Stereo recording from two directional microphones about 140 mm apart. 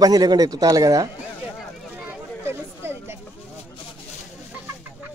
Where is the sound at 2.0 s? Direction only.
15° right (ahead or behind).